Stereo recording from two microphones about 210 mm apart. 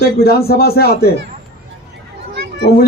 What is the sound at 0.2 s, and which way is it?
Speech, 45° left (ahead or behind).